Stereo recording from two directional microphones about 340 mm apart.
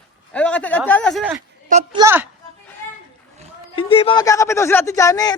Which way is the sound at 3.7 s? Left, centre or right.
Centre.